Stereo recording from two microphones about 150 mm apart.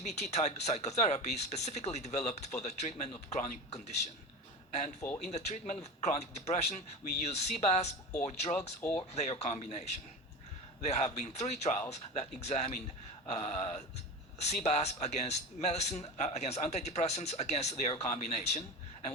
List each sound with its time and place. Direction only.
0.0 s a man's voice: 50° left (ahead or behind)
5.2 s a man's voice: 50° left (ahead or behind)
8.8 s speech: 15° left (ahead or behind)
9.1 s a man's voice: 50° left (ahead or behind)